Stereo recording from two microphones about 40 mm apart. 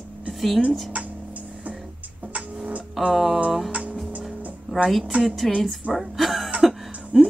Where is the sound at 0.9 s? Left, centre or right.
Right.